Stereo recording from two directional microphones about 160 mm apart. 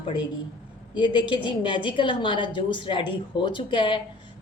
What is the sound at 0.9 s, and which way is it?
Speech, 30° left (ahead or behind).